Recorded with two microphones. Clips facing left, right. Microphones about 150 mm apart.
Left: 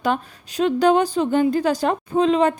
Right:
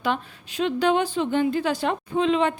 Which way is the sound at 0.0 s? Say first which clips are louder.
Left 4 dB; 40° left (ahead or behind).